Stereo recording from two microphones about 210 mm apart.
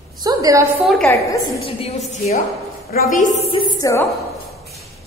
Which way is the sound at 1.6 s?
25° left (ahead or behind).